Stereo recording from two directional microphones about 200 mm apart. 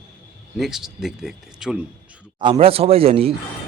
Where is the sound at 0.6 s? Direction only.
Centre (ahead or behind).